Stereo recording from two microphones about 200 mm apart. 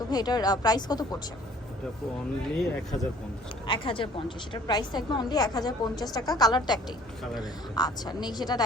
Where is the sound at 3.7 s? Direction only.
25° left (ahead or behind).